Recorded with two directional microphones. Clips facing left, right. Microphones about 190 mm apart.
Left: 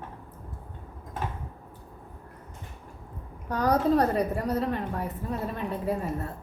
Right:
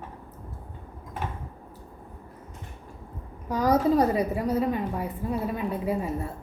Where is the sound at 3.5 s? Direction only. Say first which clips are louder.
Right 2 dB; 5° right (ahead or behind).